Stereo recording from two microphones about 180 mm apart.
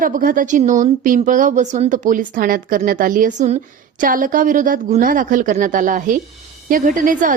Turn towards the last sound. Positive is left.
turn(degrees=-45)  # may be behind; listen again after turning